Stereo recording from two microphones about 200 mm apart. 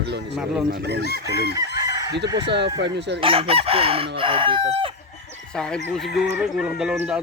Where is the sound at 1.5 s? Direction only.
20° right (ahead or behind).